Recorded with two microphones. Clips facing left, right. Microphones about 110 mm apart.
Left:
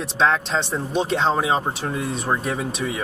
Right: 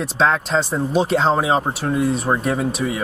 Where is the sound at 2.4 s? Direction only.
35° right (ahead or behind).